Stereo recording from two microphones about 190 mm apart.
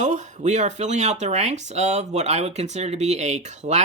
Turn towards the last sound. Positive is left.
turn(degrees=-35)  # may be behind; listen again after turning